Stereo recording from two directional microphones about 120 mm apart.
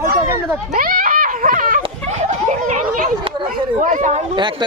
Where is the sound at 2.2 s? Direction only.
90° right.